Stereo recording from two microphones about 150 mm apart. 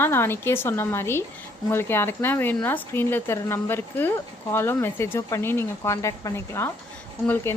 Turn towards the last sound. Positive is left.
turn(degrees=15)  # may be behind; listen again after turning